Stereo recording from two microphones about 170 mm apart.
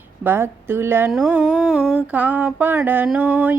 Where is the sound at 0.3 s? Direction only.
15° right (ahead or behind).